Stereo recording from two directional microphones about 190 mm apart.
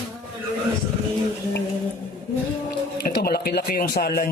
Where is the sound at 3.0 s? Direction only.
55° left (ahead or behind).